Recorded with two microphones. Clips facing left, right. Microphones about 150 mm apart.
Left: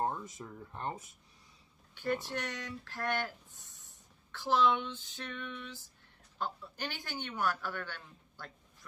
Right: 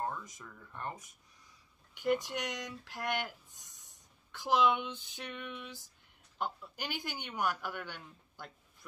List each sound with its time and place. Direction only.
0.0 s speech: 30° left (ahead or behind)
2.0 s speech: 15° right (ahead or behind)